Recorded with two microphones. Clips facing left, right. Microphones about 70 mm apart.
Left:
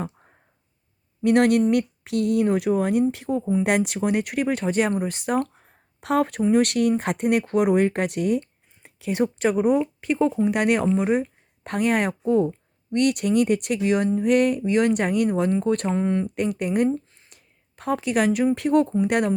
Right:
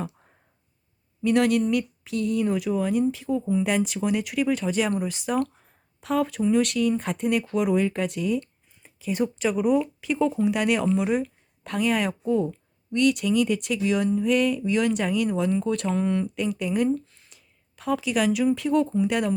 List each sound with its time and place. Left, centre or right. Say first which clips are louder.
1.2 s speech: left 3 dB; left
6.0 s speech: left 3 dB; left
10.4 s speech: left 2 dB; left
10.9 s speech: left 2 dB; left
15.9 s speech: left 1 dB; left
16.3 s speech: left 2 dB; left
16.9 s a sound: right 1 dB; left
17.2 s a sound: left 1 dB; left
18.5 s speech: left 3 dB; left